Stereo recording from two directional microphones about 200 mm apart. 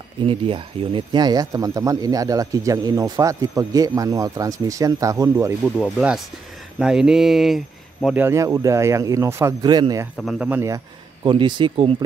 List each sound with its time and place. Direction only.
0.3 s speech: 25° right (ahead or behind)
5.8 s speech: centre (ahead or behind); by 10.0 s 20° right (ahead or behind)
10.1 s speech: 5° right (ahead or behind)
11.2 s speech: 25° right (ahead or behind)